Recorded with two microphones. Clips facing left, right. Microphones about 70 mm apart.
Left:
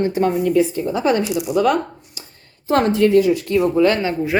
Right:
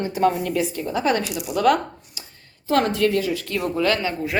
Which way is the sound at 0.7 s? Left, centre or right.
Centre.